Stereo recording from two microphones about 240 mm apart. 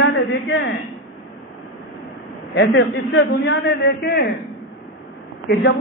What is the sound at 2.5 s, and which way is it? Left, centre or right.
A man's voice, left.